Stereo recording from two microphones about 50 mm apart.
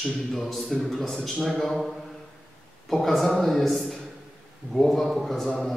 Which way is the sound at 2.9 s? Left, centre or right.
Centre.